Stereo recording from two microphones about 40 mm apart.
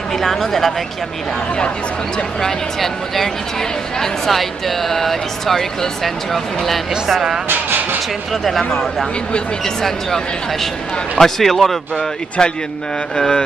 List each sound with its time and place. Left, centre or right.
0.2 s speech: centre
4.0 s speech: centre
7.4 s vehicle: right
8.3 s speech: centre
9.8 s speech: centre